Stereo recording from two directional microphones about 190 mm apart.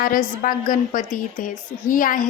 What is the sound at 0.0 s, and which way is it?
A woman's voice, 45° left (ahead or behind).